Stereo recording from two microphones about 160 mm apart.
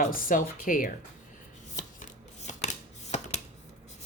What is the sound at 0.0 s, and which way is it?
Speech, 60° left (ahead or behind).